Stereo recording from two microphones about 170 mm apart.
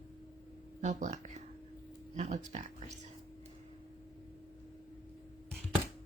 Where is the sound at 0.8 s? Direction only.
45° right (ahead or behind).